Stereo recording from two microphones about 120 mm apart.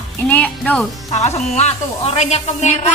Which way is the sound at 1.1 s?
65° left (ahead or behind).